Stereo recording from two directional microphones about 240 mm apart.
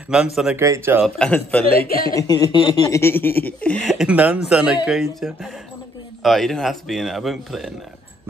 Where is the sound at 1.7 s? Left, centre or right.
Left.